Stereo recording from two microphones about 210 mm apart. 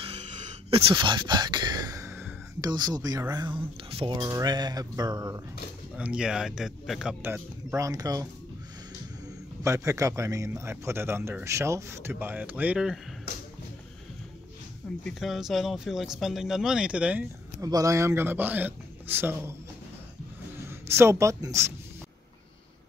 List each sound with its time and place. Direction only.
0.7 s speech: 25° right (ahead or behind)
5.9 s speech: 5° right (ahead or behind)
9.6 s a man's voice: 15° right (ahead or behind)
15.0 s a man's voice: centre (ahead or behind)
20.6 s speech: 10° right (ahead or behind)